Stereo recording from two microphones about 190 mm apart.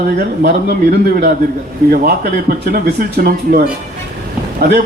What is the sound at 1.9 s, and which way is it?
A man's voice, 55° right (ahead or behind).